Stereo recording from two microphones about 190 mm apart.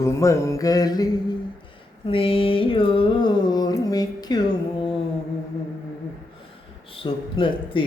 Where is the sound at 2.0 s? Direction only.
30° left (ahead or behind).